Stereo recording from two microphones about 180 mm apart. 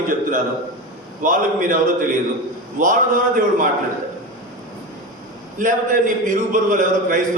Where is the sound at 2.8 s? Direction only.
45° right (ahead or behind).